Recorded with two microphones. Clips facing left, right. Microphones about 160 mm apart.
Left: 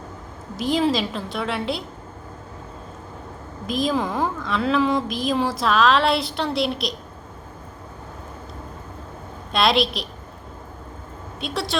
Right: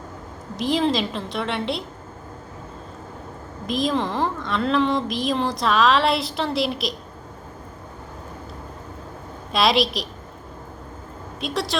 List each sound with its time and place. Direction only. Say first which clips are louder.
0.5 s a woman's voice: even; centre (ahead or behind)
3.7 s a woman's voice: even; centre (ahead or behind)
9.5 s a woman's voice: even; centre (ahead or behind)
11.3 s a woman's voice: right 1 dB; centre (ahead or behind)